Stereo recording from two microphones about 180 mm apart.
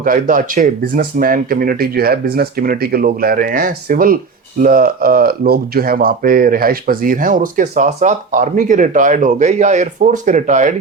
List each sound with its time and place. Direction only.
0.0 s speech: 50° right (ahead or behind)